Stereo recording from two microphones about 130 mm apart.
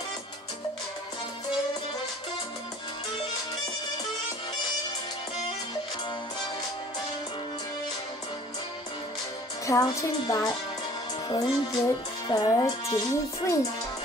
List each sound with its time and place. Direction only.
9.7 s speech: 25° left (ahead or behind)